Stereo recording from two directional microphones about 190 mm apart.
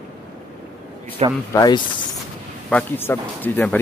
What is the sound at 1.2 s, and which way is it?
Speech, 30° right (ahead or behind).